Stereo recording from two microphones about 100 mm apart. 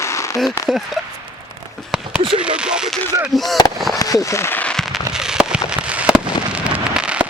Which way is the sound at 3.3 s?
Centre (ahead or behind).